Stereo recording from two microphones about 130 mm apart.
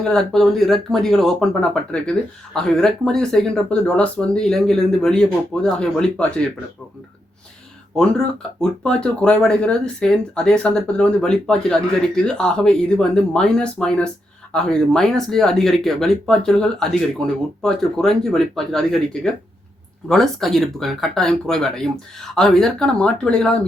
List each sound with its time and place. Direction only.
0.0 s speech: 5° left (ahead or behind)
8.6 s speech: 5° left (ahead or behind)